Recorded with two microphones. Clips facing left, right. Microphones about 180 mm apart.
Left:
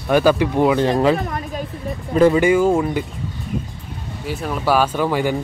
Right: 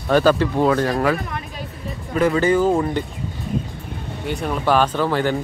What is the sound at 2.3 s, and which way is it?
Speech, 10° left (ahead or behind).